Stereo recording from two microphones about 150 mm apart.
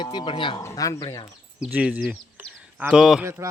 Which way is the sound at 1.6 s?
5° right (ahead or behind).